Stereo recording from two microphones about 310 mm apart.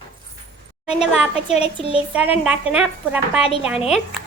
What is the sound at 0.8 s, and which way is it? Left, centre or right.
A child's voice, centre.